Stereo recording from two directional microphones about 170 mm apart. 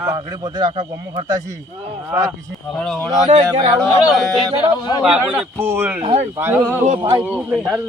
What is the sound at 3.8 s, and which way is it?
Speech, centre (ahead or behind).